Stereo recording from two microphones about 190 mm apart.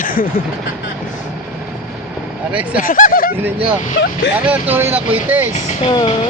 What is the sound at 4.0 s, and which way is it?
Speech, 75° left (ahead or behind).